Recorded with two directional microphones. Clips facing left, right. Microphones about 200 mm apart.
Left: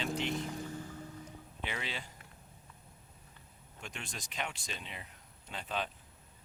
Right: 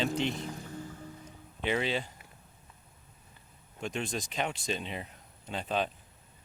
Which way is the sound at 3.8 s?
25° right (ahead or behind).